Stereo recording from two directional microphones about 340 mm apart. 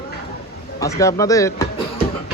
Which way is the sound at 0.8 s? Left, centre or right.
Centre.